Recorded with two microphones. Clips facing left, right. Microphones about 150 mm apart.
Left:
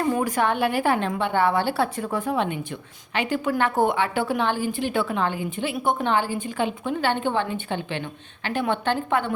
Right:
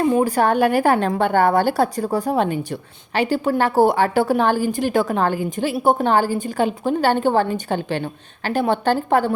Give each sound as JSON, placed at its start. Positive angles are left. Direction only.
{"t": 0.0, "sound": "a woman's voice", "side_deg": -25}